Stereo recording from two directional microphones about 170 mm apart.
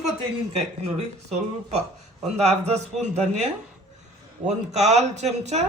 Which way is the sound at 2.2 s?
40° right (ahead or behind).